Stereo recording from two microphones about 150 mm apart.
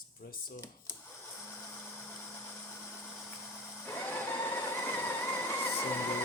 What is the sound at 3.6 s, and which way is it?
Vehicle, 15° left (ahead or behind).